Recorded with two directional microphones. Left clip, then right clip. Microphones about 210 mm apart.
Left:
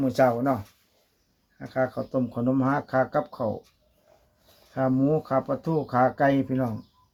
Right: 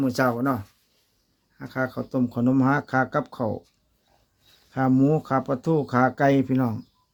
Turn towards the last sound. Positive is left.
turn(degrees=-45)  # may be behind; listen again after turning